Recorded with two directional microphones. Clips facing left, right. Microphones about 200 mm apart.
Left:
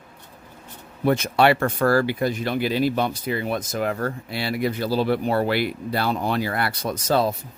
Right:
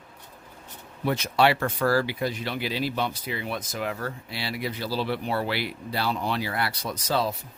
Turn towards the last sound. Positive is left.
turn(degrees=50)  # may be behind; listen again after turning